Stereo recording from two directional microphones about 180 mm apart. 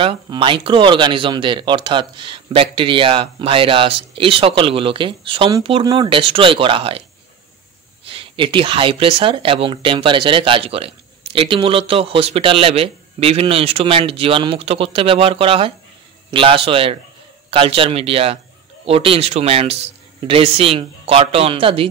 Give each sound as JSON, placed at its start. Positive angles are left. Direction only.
{"t": 0.0, "sound": "speech", "side_deg": -30}
{"t": 8.1, "sound": "speech", "side_deg": -30}